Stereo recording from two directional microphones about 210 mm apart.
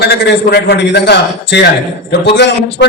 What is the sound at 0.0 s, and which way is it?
A man's voice, 50° left (ahead or behind).